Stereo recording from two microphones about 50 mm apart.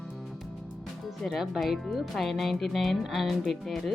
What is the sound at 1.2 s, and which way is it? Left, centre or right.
Speech, centre.